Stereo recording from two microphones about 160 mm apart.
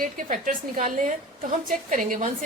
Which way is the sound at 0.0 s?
60° right (ahead or behind).